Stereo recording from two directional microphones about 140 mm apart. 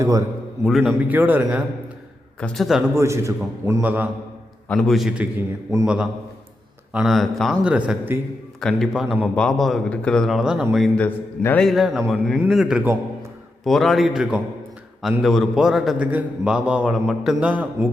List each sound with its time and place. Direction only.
0.0 s a man's voice: 20° right (ahead or behind)
0.6 s a man's voice: centre (ahead or behind)
0.9 s a man's voice: 10° right (ahead or behind)
2.4 s a man's voice: 5° left (ahead or behind)
2.9 s a man's voice: 20° right (ahead or behind)
4.7 s a man's voice: 5° left (ahead or behind); by 8.2 s 10° right (ahead or behind)
8.6 s a man's voice: centre (ahead or behind)